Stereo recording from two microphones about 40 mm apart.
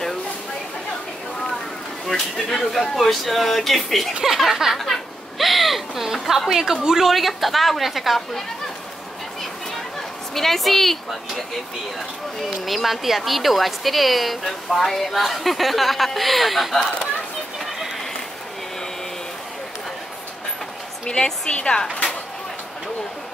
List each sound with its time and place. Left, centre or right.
2.3 s speech: centre
4.4 s a woman's voice: centre
4.7 s speech: centre
5.4 s a sound: centre
6.1 s a woman's voice: centre
10.3 s speech: centre
12.6 s speech: centre
21.0 s a woman's voice: left